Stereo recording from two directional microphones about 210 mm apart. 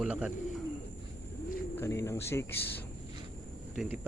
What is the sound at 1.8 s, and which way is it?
Speech, 15° left (ahead or behind).